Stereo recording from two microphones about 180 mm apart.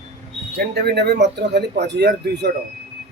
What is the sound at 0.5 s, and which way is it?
Speech, 65° right (ahead or behind).